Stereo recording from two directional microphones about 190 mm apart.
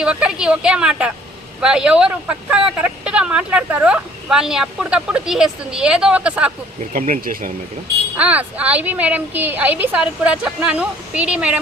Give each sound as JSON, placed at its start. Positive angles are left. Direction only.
{"t": 0.0, "sound": "speech", "side_deg": -5}
{"t": 6.9, "sound": "speech", "side_deg": -45}
{"t": 8.1, "sound": "speech", "side_deg": -10}